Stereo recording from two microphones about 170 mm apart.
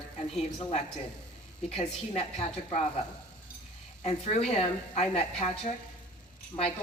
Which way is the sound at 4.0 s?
35° left (ahead or behind).